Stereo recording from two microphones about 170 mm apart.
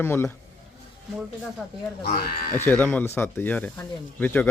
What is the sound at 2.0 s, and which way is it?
Speech, 55° left (ahead or behind).